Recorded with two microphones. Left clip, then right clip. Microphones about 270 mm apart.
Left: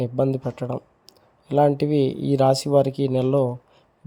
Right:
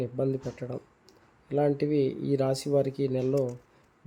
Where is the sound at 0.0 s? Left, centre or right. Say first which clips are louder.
Left 7 dB; left.